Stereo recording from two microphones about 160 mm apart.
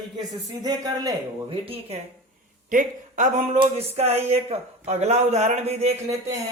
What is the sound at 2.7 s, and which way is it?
Speech, 55° right (ahead or behind).